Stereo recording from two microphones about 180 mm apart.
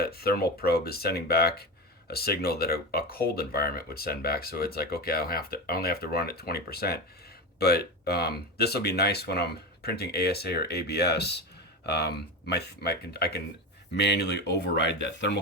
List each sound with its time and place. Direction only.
0.0 s speech: 60° left (ahead or behind); by 15.4 s 75° left (ahead or behind)